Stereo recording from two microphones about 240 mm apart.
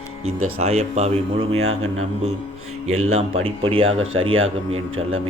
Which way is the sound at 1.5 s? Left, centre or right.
Right.